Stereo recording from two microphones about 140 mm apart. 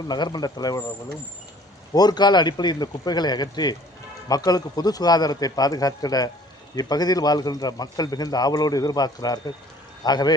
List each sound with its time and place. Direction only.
0.1 s a man's voice: 30° left (ahead or behind)
1.9 s a man's voice: 30° left (ahead or behind)